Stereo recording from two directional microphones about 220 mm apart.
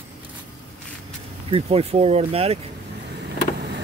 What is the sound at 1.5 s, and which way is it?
Speech, 25° right (ahead or behind).